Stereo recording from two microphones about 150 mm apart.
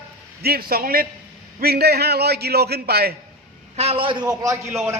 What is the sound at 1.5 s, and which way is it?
A man's voice, 90° right.